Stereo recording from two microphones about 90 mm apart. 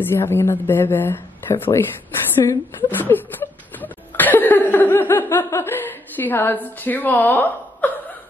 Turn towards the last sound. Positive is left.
turn(degrees=20)  # may be behind; listen again after turning